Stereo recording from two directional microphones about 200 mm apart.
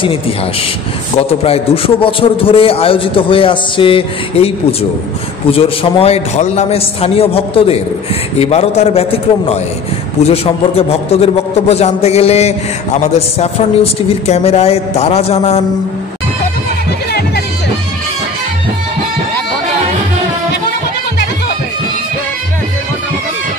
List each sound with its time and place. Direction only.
1.1 s a man's voice: 30° left (ahead or behind)